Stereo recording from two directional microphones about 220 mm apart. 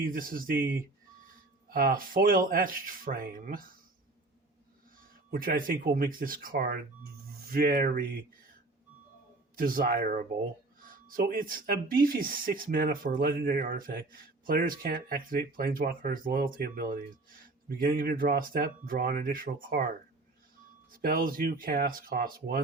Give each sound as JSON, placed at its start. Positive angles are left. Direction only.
{"t": 0.0, "sound": "speech", "side_deg": -40}
{"t": 1.7, "sound": "speech", "side_deg": -40}
{"t": 4.9, "sound": "speech", "side_deg": -40}
{"t": 9.6, "sound": "speech", "side_deg": -40}
{"t": 20.9, "sound": "speech", "side_deg": -40}